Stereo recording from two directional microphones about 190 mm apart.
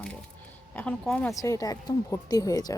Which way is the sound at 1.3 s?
15° left (ahead or behind).